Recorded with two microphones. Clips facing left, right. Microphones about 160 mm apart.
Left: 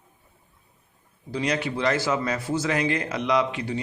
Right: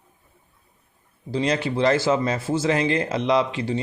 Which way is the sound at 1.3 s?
30° right (ahead or behind).